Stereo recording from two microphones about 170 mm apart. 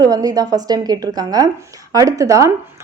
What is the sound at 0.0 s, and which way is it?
A woman's voice, 20° right (ahead or behind).